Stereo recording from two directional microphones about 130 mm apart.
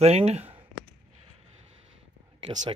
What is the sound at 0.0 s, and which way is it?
Speech, 55° right (ahead or behind).